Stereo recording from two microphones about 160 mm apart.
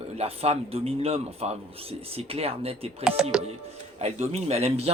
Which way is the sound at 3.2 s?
5° right (ahead or behind).